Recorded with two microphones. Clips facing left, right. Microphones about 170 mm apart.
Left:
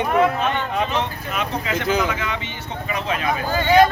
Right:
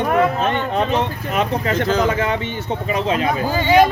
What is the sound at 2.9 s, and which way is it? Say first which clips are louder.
Speech: right 5 dB; 25° right (ahead or behind).